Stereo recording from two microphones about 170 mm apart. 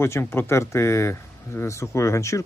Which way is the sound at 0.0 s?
15° left (ahead or behind).